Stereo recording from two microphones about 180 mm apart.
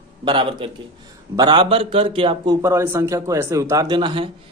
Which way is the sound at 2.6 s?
15° right (ahead or behind).